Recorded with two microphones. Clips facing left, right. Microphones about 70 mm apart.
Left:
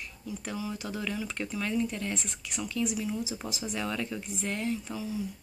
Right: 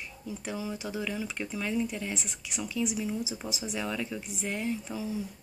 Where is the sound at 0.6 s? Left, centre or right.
Centre.